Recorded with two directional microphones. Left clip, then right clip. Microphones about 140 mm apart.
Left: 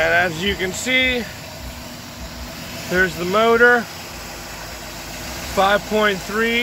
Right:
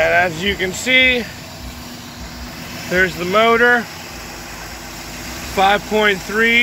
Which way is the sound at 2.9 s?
15° left (ahead or behind).